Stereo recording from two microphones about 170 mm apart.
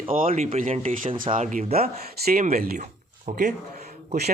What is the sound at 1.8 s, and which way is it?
Speech, 60° right (ahead or behind).